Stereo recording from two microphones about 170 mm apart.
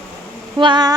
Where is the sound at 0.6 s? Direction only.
25° right (ahead or behind).